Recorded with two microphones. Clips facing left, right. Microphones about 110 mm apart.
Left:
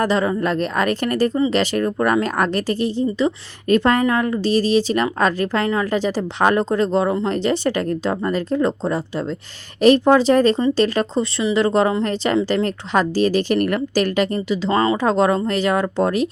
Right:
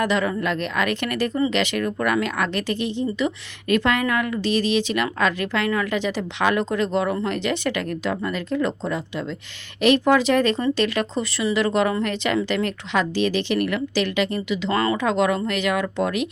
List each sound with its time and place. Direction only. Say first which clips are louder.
0.0 s speech: left 3 dB; 35° left (ahead or behind)
14.3 s speech: left 4 dB; 30° left (ahead or behind)